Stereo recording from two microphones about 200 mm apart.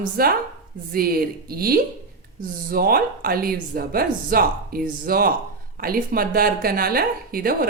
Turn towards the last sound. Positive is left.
turn(degrees=-45)  # may be behind; listen again after turning